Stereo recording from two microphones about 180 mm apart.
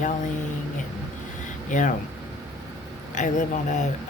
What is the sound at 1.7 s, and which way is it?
Speech, 45° left (ahead or behind).